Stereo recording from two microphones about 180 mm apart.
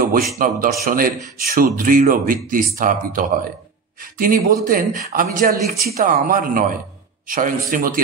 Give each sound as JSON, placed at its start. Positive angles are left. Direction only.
{"t": 0.4, "sound": "a man's voice", "side_deg": -50}